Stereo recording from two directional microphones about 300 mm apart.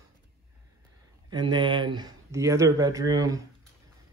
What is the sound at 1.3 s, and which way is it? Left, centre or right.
Speech, centre.